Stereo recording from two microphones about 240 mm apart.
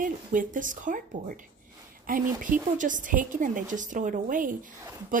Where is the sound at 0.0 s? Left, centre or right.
Right.